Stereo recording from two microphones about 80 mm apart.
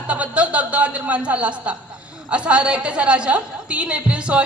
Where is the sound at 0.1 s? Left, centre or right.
Centre.